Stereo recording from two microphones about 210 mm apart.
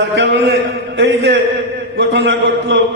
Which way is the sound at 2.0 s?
55° right (ahead or behind).